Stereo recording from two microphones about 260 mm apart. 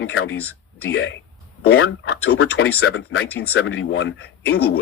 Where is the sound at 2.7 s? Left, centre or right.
Left.